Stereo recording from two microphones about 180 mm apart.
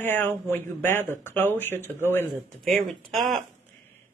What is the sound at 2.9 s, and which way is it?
Speech, centre (ahead or behind).